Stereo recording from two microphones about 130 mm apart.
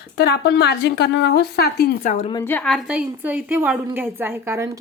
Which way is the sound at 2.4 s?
15° left (ahead or behind).